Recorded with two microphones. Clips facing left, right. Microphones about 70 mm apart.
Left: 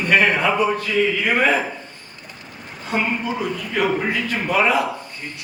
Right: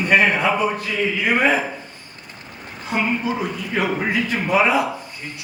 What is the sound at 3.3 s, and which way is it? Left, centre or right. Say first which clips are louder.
A man's voice: left 1 dB; centre.